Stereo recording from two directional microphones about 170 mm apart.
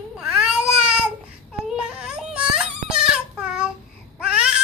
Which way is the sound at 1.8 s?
5° right (ahead or behind).